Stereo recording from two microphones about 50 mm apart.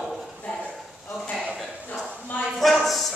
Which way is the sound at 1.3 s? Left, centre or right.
Centre.